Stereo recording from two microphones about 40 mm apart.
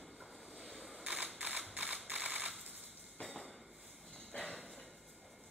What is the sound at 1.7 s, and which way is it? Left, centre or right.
Camera, right.